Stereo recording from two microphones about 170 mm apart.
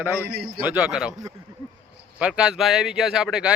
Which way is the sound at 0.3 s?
70° right (ahead or behind).